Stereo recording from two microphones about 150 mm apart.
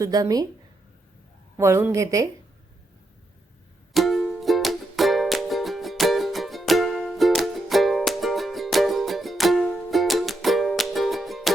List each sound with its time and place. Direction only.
0.0 s a woman's voice: 25° right (ahead or behind)
1.5 s a woman's voice: 20° right (ahead or behind)
3.9 s music: centre (ahead or behind)